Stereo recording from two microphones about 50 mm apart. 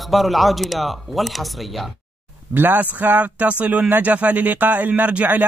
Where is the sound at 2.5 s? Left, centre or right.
Right.